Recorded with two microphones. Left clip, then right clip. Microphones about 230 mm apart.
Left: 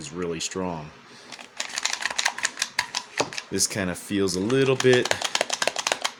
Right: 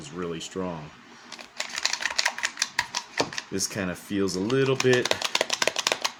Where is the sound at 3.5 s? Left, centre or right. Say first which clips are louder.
Left 4 dB; left.